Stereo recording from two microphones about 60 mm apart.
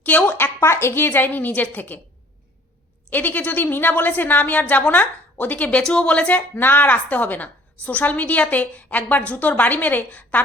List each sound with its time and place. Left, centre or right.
0.0 s a woman's voice: left
3.1 s a woman's voice: left
6.5 s a woman's voice: left